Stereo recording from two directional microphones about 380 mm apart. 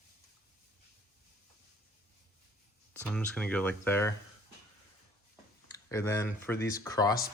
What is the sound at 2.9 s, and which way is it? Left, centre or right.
Speech, centre.